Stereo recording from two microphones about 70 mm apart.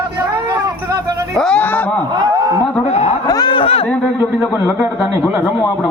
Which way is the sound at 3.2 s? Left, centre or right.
Left.